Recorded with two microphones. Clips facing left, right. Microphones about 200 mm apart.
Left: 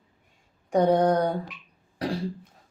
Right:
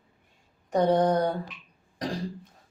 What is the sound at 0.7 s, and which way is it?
Speech, 10° left (ahead or behind).